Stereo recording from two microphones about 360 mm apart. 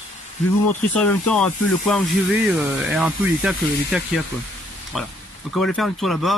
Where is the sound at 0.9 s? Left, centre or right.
Centre.